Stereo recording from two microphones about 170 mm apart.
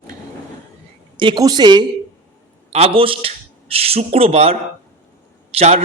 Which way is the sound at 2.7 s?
35° right (ahead or behind).